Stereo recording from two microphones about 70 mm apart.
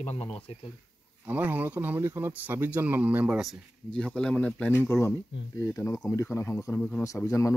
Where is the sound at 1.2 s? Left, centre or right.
Right.